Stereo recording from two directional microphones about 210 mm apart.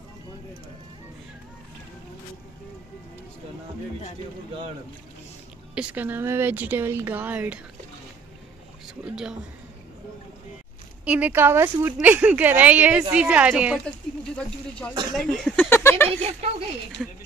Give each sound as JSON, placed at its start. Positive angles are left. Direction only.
{"t": 5.8, "sound": "speech", "side_deg": -5}
{"t": 9.1, "sound": "a woman's voice", "side_deg": -5}
{"t": 11.1, "sound": "a woman's voice", "side_deg": -10}
{"t": 13.8, "sound": "speech", "side_deg": 5}
{"t": 15.1, "sound": "a sound", "side_deg": 0}
{"t": 16.1, "sound": "speech", "side_deg": -30}